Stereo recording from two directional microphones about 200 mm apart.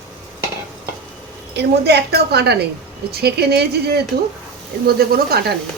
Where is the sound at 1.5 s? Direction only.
55° right (ahead or behind).